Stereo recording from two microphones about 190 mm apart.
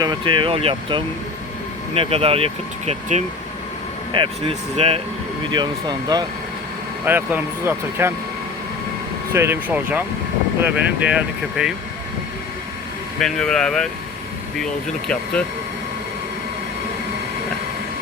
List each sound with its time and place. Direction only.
0.0 s speech: 25° right (ahead or behind)
7.0 s speech: 10° right (ahead or behind)
9.3 s speech: 15° right (ahead or behind)
13.1 s speech: centre (ahead or behind)